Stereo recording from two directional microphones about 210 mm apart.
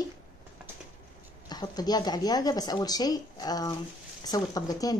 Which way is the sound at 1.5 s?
20° left (ahead or behind).